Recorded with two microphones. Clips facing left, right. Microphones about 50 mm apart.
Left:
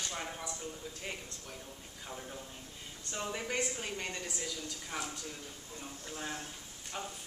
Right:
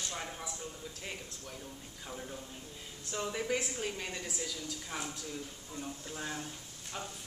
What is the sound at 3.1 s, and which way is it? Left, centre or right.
Speech, centre.